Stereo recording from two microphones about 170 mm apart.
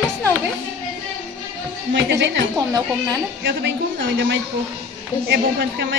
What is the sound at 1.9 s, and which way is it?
Speech, 90° right.